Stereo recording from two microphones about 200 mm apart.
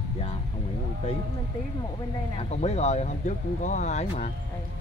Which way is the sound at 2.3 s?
30° left (ahead or behind).